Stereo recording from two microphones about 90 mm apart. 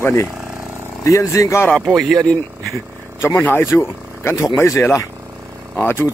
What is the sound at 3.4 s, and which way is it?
Speech, 25° left (ahead or behind).